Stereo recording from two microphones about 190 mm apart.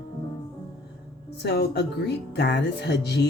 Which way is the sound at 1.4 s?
60° left (ahead or behind).